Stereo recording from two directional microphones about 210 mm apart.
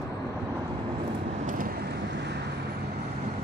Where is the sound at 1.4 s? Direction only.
40° right (ahead or behind).